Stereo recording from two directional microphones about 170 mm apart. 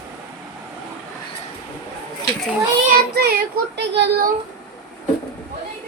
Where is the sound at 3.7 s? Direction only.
80° right.